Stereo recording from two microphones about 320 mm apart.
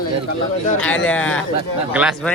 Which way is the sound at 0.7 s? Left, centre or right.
Centre.